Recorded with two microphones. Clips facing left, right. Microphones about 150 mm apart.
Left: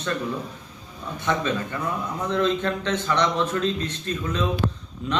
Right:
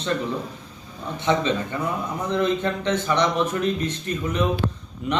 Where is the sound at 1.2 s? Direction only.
20° right (ahead or behind).